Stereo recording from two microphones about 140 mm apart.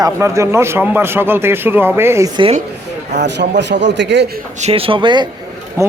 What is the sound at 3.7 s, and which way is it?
Speech, 90° right.